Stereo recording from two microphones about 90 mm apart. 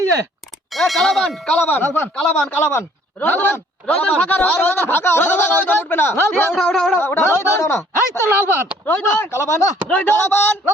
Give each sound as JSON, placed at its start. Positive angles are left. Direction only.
{"t": 0.7, "sound": "speech", "side_deg": 0}
{"t": 1.6, "sound": "speech", "side_deg": 25}
{"t": 2.1, "sound": "a man's voice", "side_deg": 10}
{"t": 2.6, "sound": "speech", "side_deg": 25}
{"t": 6.5, "sound": "speech", "side_deg": 5}
{"t": 7.0, "sound": "speech", "side_deg": 25}
{"t": 9.9, "sound": "speech", "side_deg": 20}